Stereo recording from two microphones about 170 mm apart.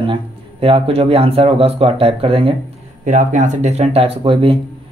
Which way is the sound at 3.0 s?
45° right (ahead or behind).